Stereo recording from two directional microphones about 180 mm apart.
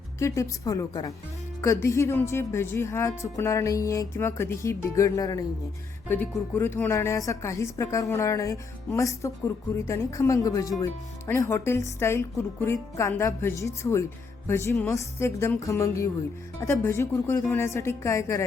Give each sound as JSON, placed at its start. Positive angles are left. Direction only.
{"t": 0.2, "sound": "speech", "side_deg": 15}